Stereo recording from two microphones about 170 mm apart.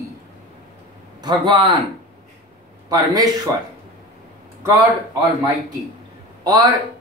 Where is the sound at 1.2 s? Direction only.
30° right (ahead or behind).